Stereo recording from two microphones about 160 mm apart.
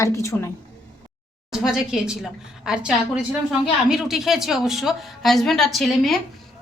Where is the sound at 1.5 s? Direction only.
5° right (ahead or behind).